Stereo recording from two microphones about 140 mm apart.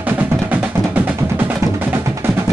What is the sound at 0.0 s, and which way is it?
Music, 15° right (ahead or behind).